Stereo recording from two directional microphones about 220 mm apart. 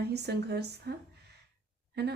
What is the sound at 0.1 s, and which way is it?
Speech, 50° right (ahead or behind).